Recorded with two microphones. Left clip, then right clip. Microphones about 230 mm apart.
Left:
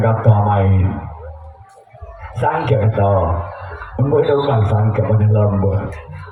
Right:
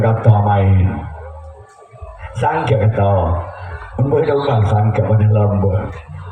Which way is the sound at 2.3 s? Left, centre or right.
Right.